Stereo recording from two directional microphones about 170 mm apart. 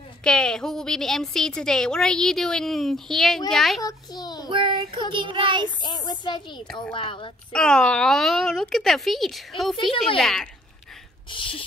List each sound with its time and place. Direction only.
0.2 s a woman's voice: 5° left (ahead or behind)
3.8 s a child's voice: 25° left (ahead or behind)
4.5 s child singing: 30° right (ahead or behind)
5.8 s a child's voice: 25° left (ahead or behind)
7.5 s a woman's voice: 5° left (ahead or behind)
11.2 s a sound: 30° left (ahead or behind)